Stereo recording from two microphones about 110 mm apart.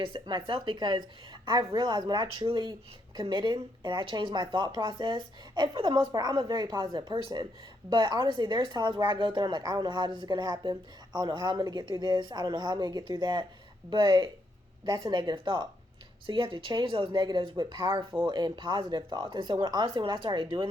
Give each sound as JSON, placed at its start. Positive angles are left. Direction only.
{"t": 0.0, "sound": "a woman's voice", "side_deg": -40}
{"t": 6.1, "sound": "a woman's voice", "side_deg": -40}